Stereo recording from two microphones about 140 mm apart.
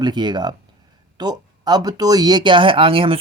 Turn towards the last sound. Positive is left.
turn(degrees=-40)  # may be behind; listen again after turning